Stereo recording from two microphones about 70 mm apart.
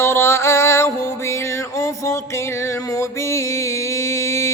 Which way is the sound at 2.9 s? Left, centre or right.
Left.